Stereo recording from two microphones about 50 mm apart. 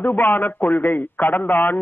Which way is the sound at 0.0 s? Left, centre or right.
Left.